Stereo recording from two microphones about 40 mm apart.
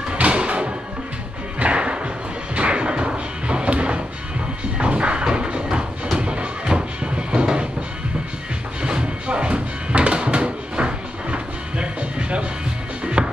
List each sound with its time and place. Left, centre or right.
0.1 s music: right
1.6 s thump: right
2.5 s music: right
5.2 s a sound: right
6.1 s music: right
8.8 s music: right